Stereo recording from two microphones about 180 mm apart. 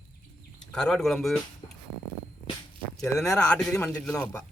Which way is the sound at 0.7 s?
5° left (ahead or behind).